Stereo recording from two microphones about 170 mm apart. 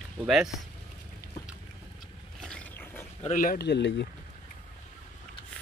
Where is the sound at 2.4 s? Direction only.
5° left (ahead or behind).